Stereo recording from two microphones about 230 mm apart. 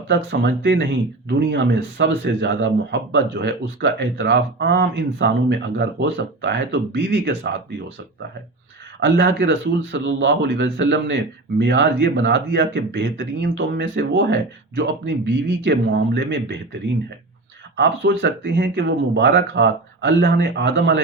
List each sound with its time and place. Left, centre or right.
0.1 s speech: right
9.0 s speech: right
17.7 s speech: right